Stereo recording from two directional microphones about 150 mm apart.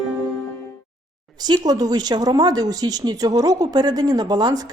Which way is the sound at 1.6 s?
25° right (ahead or behind).